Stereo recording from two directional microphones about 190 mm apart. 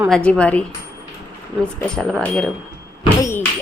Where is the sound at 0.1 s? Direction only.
5° left (ahead or behind).